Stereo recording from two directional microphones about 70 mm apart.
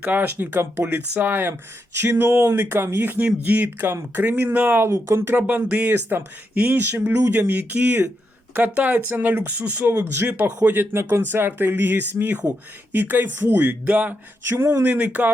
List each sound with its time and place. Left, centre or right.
0.0 s speech: right
0.3 s speech: right
4.9 s speech: right
5.2 s speech: right
5.9 s speech: right
10.9 s speech: right